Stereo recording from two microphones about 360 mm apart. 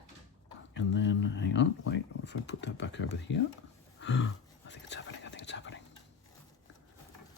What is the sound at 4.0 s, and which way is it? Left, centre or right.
Whispering, left.